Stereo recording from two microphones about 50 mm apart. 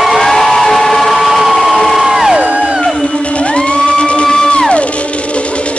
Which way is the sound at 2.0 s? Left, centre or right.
Centre.